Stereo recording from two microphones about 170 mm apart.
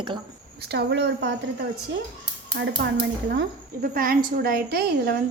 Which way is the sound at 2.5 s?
75° right (ahead or behind).